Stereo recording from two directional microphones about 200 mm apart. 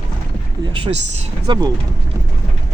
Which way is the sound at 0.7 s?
30° right (ahead or behind).